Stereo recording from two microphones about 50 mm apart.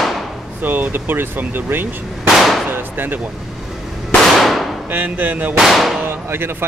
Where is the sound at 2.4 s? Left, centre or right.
Centre.